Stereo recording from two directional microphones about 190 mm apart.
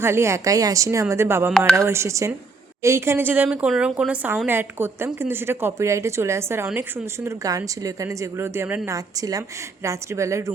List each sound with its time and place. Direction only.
0.0 s speech: 15° right (ahead or behind)